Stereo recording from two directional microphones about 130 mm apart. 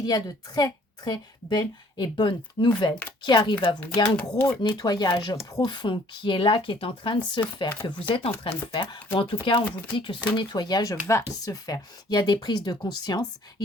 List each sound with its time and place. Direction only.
0.0 s a woman's voice: 30° left (ahead or behind)
4.0 s speech: 10° left (ahead or behind)
4.6 s a woman's voice: 35° left (ahead or behind)